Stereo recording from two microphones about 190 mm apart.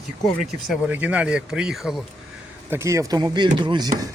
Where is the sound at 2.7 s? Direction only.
15° right (ahead or behind).